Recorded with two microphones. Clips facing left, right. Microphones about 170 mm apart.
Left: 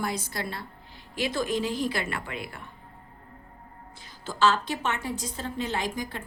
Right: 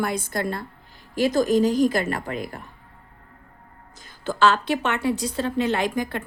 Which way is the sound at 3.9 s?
55° right (ahead or behind).